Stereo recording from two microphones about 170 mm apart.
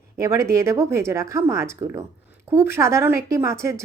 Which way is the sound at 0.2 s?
15° right (ahead or behind).